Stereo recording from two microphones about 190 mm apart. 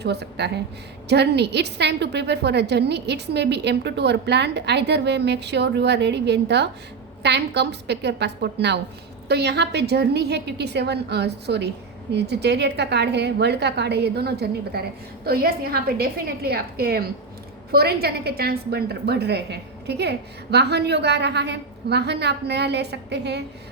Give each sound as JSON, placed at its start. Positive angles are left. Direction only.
{"t": 0.0, "sound": "a woman's voice", "side_deg": -60}